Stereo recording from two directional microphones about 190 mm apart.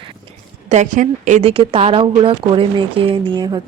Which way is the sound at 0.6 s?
40° right (ahead or behind).